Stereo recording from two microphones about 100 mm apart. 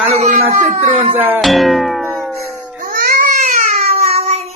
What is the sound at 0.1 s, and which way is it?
Speech, 90° right.